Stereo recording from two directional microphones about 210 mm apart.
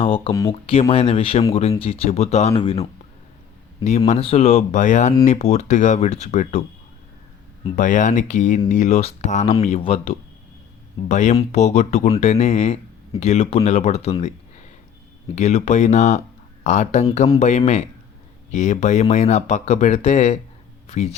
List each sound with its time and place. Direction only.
0.0 s speech: 25° left (ahead or behind)
3.8 s speech: 30° left (ahead or behind)
15.4 s speech: 30° left (ahead or behind)
18.5 s speech: 35° left (ahead or behind)